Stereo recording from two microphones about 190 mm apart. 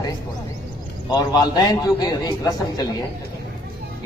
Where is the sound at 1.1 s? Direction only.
20° left (ahead or behind).